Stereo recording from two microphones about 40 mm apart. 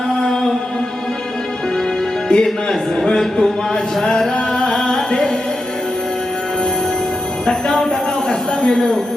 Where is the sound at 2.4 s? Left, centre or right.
Centre.